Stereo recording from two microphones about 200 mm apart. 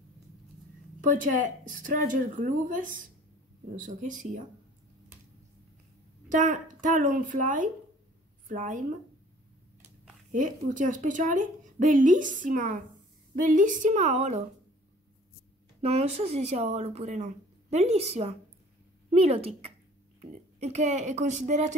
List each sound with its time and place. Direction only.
1.0 s speech: 40° right (ahead or behind)
6.2 s a woman's voice: 40° right (ahead or behind)
10.3 s speech: 40° right (ahead or behind)
15.8 s speech: 35° right (ahead or behind)